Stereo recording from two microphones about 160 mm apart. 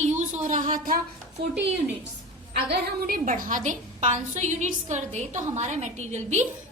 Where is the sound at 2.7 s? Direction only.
70° right (ahead or behind).